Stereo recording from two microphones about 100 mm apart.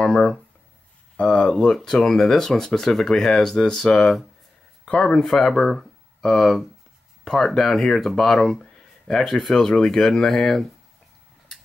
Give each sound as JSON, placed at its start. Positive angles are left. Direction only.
{"t": 0.0, "sound": "speech", "side_deg": 10}